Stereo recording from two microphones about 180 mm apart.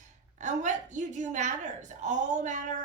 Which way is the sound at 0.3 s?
40° right (ahead or behind).